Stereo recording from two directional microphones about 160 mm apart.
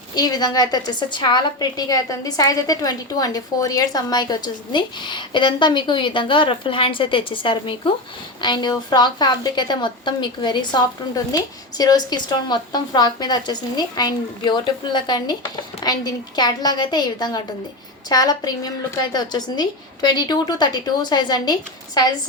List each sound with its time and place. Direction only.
0.2 s a woman's voice: 25° left (ahead or behind)